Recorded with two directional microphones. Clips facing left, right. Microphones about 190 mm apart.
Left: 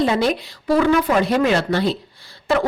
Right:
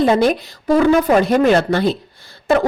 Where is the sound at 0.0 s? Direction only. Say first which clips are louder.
Right 4 dB; 50° right (ahead or behind).